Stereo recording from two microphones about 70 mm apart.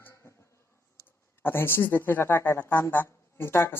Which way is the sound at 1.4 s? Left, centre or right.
Left.